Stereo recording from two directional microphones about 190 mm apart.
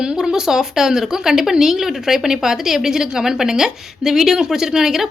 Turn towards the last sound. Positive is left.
turn(degrees=0)  # may be behind; listen again after turning